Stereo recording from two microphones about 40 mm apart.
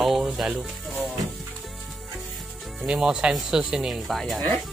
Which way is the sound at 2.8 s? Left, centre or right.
Right.